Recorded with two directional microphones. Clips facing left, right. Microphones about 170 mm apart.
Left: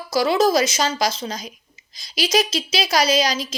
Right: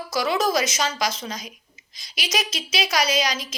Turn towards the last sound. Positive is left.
turn(degrees=30)  # may be behind; listen again after turning